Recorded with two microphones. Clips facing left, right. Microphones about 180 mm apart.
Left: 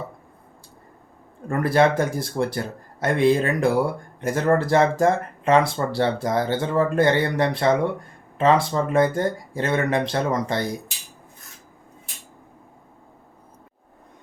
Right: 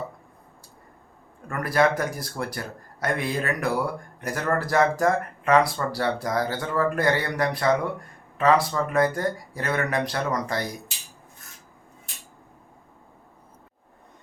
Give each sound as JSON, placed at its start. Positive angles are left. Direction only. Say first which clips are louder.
{"t": 1.5, "sound": "speech", "louder": "left 4 dB", "side_deg": 25}